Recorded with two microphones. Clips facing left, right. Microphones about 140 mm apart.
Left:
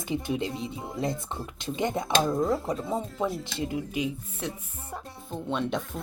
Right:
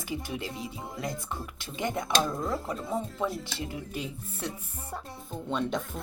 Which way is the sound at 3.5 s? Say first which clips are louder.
Left 6 dB; 20° left (ahead or behind).